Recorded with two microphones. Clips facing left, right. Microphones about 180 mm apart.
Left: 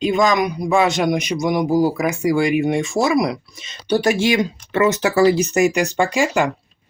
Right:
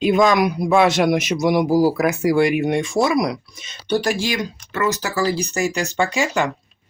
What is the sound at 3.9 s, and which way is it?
Speech, 15° left (ahead or behind).